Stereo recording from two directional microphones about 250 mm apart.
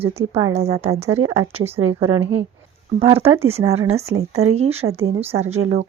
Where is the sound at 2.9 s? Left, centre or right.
Right.